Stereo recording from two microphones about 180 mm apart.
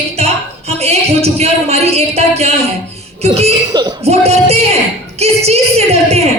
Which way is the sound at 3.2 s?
35° right (ahead or behind).